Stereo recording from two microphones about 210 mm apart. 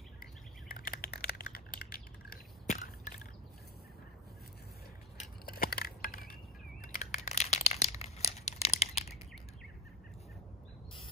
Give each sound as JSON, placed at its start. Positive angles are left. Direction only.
{"t": 0.7, "sound": "typing", "side_deg": 45}
{"t": 5.1, "sound": "crushing", "side_deg": 45}
{"t": 6.8, "sound": "a sound", "side_deg": 35}